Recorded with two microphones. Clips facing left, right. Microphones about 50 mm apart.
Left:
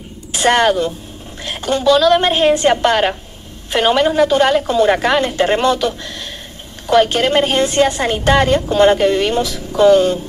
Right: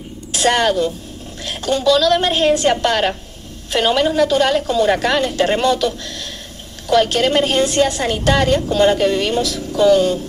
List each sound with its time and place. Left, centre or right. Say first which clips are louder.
0.3 s a woman's voice: left 3 dB; centre